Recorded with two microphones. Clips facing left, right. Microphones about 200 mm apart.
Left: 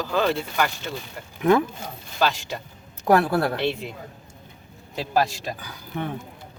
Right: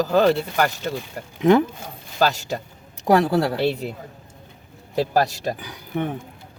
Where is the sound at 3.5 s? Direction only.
40° right (ahead or behind).